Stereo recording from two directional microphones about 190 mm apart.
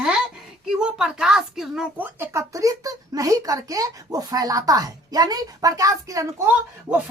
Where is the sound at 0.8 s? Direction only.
5° right (ahead or behind).